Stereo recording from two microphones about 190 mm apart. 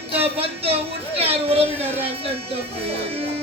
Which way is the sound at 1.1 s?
30° right (ahead or behind).